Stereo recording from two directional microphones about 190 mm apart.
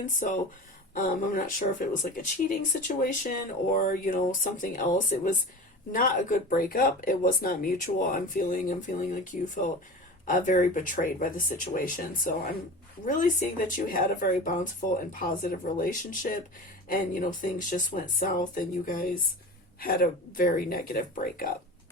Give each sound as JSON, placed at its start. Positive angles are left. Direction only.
{"t": 0.0, "sound": "speech", "side_deg": 40}